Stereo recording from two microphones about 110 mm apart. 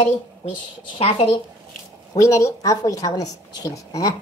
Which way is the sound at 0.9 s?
60° left (ahead or behind).